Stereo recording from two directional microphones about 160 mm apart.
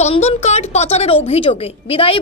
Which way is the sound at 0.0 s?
40° left (ahead or behind).